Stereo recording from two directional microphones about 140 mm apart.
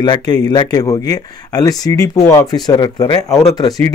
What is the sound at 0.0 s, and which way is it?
Speech, 30° left (ahead or behind).